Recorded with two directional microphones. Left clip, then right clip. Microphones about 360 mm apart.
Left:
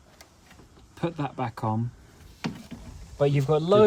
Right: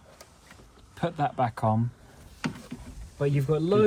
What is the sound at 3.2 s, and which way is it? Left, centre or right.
Speech, centre.